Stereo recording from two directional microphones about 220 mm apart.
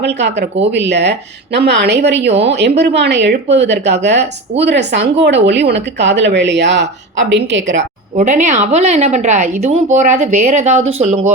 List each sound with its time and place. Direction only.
0.0 s speech: 50° right (ahead or behind)
8.1 s a woman's voice: 35° right (ahead or behind)